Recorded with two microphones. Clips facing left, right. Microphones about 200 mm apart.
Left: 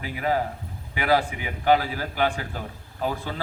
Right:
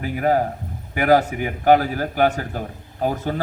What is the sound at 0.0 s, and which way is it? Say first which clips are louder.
A man's voice: right 6 dB; 50° right (ahead or behind).